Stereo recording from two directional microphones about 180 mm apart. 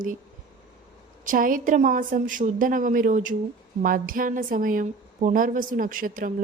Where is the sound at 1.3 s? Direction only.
50° right (ahead or behind).